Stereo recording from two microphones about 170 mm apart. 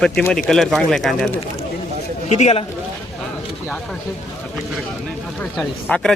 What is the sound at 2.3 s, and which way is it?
Speech, 40° left (ahead or behind).